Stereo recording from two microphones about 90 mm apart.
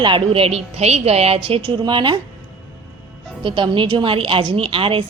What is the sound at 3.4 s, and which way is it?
A woman's voice, 65° right (ahead or behind).